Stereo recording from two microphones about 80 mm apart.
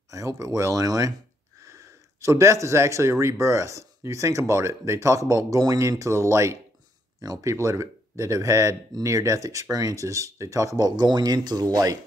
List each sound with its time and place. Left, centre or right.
0.1 s speech: right
2.2 s speech: right